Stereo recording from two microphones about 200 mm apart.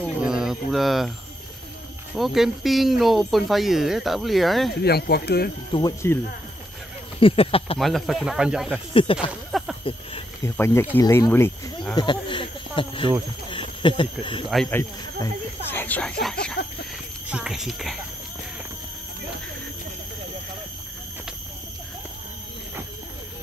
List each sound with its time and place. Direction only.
0.2 s a sound: 5° right (ahead or behind)
2.1 s speech: centre (ahead or behind)
4.8 s speech: 50° left (ahead or behind)
5.7 s speech: 20° left (ahead or behind)
7.2 s speech: 25° left (ahead or behind)
7.8 s speech: centre (ahead or behind)
8.9 s speech: 25° left (ahead or behind)
9.5 s snake: centre (ahead or behind)
10.4 s speech: 15° left (ahead or behind)
12.0 s speech: 25° left (ahead or behind)
13.5 s a sound: 25° left (ahead or behind)
14.5 s speech: 5° left (ahead or behind)
14.8 s speech: 15° left (ahead or behind)